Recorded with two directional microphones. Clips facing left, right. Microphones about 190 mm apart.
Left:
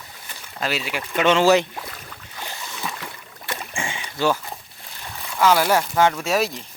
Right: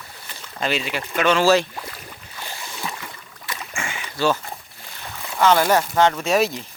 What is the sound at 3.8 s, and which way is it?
Rowboat, 15° left (ahead or behind).